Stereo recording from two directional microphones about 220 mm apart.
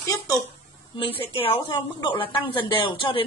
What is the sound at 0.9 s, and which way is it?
A woman's voice, 25° left (ahead or behind).